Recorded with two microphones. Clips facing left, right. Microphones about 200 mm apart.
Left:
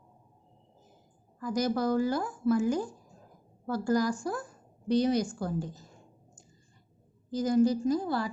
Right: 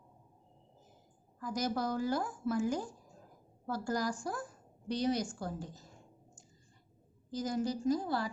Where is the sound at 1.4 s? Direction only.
75° left (ahead or behind).